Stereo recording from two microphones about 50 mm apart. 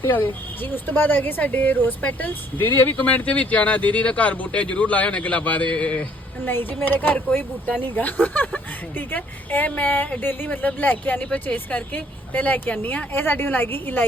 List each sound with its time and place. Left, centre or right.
0.0 s speech: left
2.6 s a woman's voice: left
3.0 s speech: left
6.4 s a woman's voice: left